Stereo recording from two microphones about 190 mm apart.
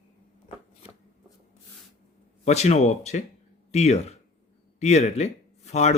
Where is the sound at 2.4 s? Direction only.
35° left (ahead or behind).